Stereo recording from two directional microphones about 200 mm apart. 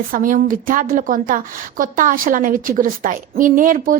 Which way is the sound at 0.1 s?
45° right (ahead or behind).